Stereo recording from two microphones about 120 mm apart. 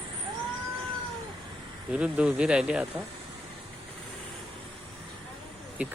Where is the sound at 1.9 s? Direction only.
10° right (ahead or behind).